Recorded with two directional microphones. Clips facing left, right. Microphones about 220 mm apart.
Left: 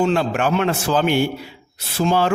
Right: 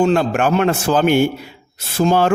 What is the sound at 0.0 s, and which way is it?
A man's voice, 45° right (ahead or behind).